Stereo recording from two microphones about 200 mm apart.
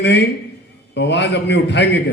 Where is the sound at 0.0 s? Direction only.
60° left (ahead or behind).